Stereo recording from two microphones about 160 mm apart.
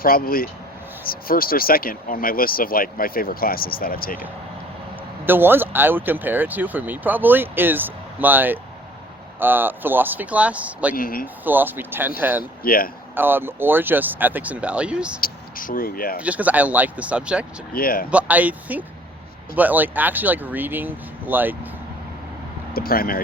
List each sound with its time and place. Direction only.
0.0 s speech: 65° left (ahead or behind)
5.2 s speech: 15° right (ahead or behind)
10.9 s speech: 65° left (ahead or behind)
11.4 s speech: 10° right (ahead or behind)
12.6 s speech: 65° left (ahead or behind)
13.1 s speech: 15° right (ahead or behind)
15.2 s speech: 60° left (ahead or behind)
16.1 s speech: 10° right (ahead or behind)
17.7 s speech: 65° left (ahead or behind)
18.1 s speech: 10° right (ahead or behind)
22.7 s speech: 70° left (ahead or behind)